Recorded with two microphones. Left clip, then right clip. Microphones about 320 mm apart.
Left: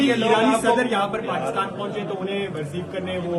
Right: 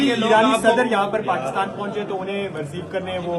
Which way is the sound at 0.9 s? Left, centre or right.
Centre.